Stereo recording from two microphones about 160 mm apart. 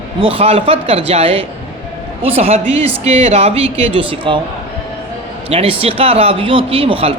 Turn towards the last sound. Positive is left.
turn(degrees=-35)  # may be behind; listen again after turning